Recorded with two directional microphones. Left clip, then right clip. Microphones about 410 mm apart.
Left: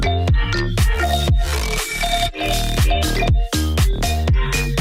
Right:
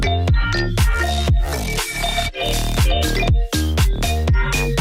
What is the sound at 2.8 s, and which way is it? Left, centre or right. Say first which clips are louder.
Music: even; centre.